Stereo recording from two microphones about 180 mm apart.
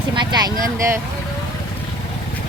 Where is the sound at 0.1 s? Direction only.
25° right (ahead or behind).